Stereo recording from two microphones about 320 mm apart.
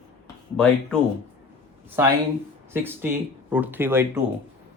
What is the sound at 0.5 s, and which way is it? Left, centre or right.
Speech, centre.